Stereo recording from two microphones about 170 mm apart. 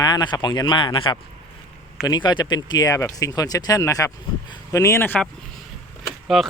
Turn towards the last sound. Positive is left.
turn(degrees=0)  # may be behind; listen again after turning